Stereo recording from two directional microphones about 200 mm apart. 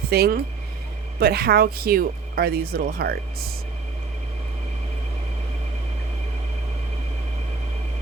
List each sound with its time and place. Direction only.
0.1 s speech: 50° right (ahead or behind)